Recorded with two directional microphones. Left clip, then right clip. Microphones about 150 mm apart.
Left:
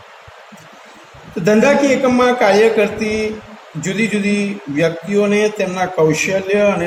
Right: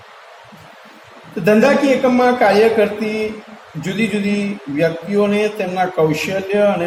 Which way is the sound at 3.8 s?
35° left (ahead or behind).